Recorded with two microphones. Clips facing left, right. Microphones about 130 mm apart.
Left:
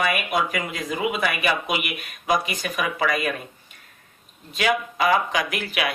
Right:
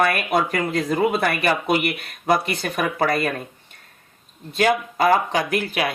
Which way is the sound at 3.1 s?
35° right (ahead or behind).